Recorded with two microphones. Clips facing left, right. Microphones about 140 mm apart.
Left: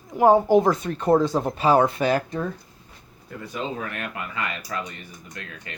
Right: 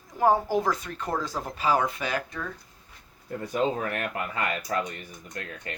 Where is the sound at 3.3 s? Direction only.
45° right (ahead or behind).